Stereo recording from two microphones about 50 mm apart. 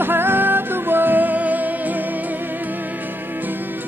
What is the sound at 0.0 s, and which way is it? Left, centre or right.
Music, right.